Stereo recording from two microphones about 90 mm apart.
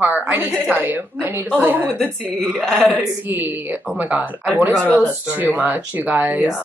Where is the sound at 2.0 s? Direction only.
10° left (ahead or behind).